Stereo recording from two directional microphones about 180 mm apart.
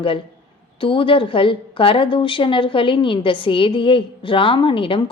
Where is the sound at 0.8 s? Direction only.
30° left (ahead or behind).